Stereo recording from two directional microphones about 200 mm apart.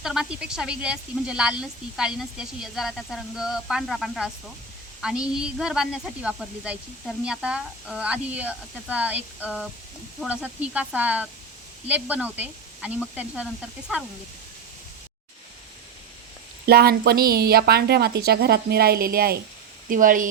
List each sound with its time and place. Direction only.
0.0 s speech: 5° right (ahead or behind)
16.6 s a woman's voice: 50° right (ahead or behind)